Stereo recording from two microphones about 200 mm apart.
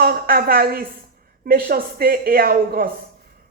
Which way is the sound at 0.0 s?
50° right (ahead or behind).